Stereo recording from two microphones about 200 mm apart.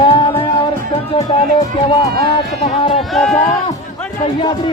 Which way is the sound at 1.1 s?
25° left (ahead or behind).